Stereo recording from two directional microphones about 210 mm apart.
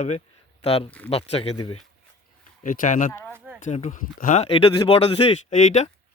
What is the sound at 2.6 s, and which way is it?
Speech, 40° left (ahead or behind).